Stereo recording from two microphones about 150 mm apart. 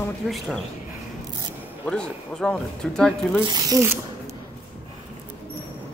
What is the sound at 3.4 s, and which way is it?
Speech, 25° right (ahead or behind).